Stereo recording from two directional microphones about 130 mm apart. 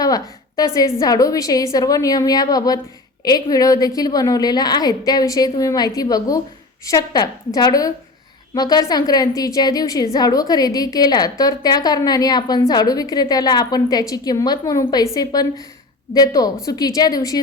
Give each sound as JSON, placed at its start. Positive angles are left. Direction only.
{"t": 0.0, "sound": "a woman's voice", "side_deg": 30}